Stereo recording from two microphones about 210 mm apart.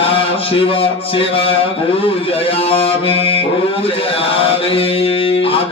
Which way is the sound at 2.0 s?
25° left (ahead or behind).